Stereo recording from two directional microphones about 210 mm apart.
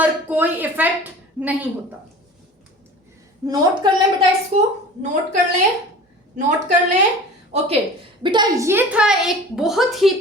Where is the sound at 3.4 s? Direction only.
20° right (ahead or behind).